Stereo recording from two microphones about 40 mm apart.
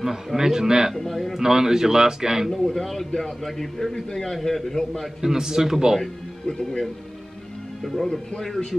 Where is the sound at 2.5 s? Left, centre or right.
Centre.